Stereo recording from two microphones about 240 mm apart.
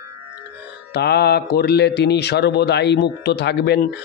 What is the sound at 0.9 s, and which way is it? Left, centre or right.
Speech, left.